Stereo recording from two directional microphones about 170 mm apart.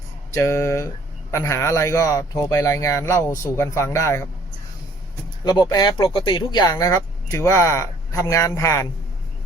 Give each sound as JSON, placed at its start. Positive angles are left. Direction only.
{"t": 0.3, "sound": "speech", "side_deg": 15}
{"t": 5.5, "sound": "speech", "side_deg": 25}